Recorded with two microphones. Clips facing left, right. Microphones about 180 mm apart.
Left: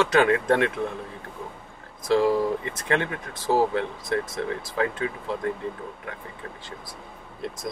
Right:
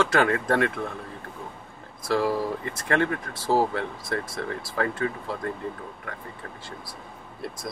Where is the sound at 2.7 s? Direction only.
20° left (ahead or behind).